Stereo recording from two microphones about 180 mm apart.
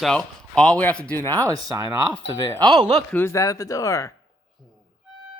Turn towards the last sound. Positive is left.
turn(degrees=15)  # may be behind; listen again after turning